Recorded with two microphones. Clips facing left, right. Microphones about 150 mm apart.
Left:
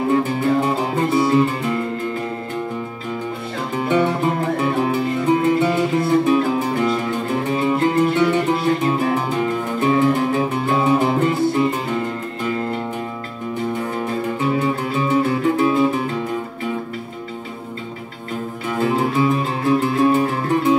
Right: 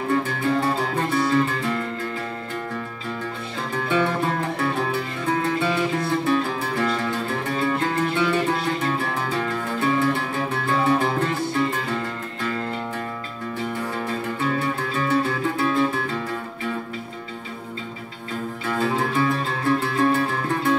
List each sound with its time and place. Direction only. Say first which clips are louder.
0.1 s music: left 3 dB; 15° left (ahead or behind)
3.7 s music: left 4 dB; 15° left (ahead or behind)
13.9 s music: left 4 dB; 15° left (ahead or behind)
18.7 s music: left 4 dB; 15° left (ahead or behind)